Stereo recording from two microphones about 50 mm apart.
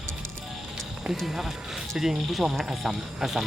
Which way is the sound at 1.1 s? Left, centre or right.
Centre.